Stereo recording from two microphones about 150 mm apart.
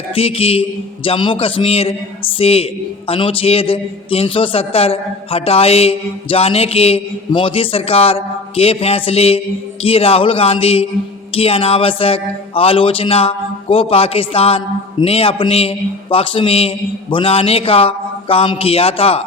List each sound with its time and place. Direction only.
0.1 s a man's voice: 40° left (ahead or behind)